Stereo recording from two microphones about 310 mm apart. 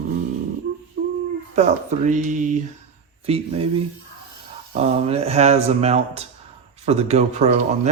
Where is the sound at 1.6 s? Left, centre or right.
Right.